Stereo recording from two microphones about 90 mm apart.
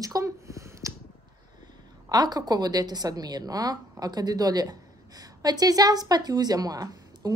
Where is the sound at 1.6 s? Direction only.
50° right (ahead or behind).